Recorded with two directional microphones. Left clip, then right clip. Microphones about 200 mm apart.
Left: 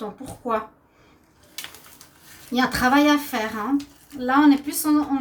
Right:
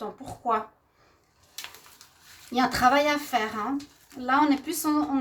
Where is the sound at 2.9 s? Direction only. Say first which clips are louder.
Left 4 dB; 35° right (ahead or behind).